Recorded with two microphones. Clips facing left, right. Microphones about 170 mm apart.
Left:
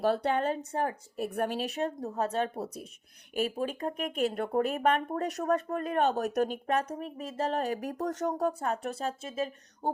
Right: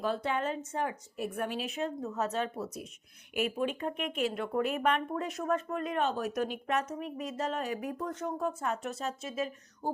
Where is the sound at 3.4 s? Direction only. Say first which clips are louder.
Left 1 dB; 35° left (ahead or behind).